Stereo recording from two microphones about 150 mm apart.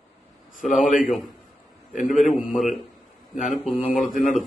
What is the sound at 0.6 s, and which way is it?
Speech, 60° left (ahead or behind).